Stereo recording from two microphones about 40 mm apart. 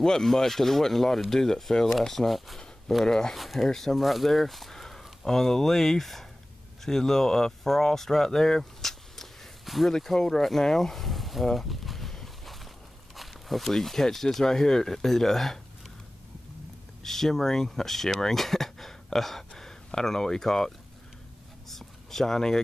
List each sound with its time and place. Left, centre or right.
0.0 s speech: centre
3.1 s speech: centre
3.3 s speech: centre
9.9 s speech: centre
11.4 s a sound: centre
13.1 s speech: centre
17.0 s speech: centre
21.6 s a sound: centre